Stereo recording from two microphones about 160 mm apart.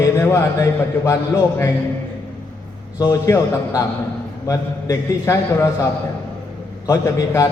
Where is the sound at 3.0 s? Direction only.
20° left (ahead or behind).